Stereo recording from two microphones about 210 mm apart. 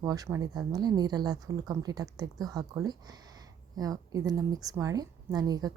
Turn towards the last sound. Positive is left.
turn(degrees=-20)  # may be behind; listen again after turning